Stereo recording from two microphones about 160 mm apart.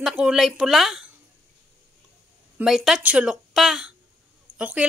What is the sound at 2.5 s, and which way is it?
A woman's voice, 5° right (ahead or behind).